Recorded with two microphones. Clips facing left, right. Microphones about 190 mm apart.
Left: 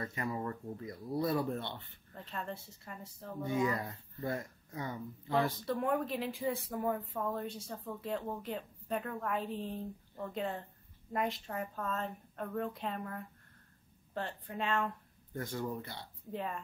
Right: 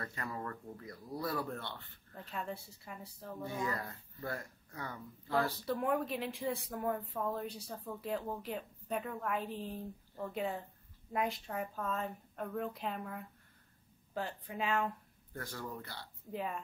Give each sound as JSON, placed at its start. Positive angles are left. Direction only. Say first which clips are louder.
{"t": 0.0, "sound": "speech", "louder": "left 4 dB", "side_deg": 20}
{"t": 2.3, "sound": "a woman's voice", "louder": "even", "side_deg": -5}
{"t": 3.4, "sound": "speech", "louder": "left 6 dB", "side_deg": 20}
{"t": 5.7, "sound": "a woman's voice", "louder": "left 1 dB", "side_deg": 0}
{"t": 15.3, "sound": "speech", "louder": "left 5 dB", "side_deg": 20}
{"t": 16.3, "sound": "a woman's voice", "louder": "even", "side_deg": -5}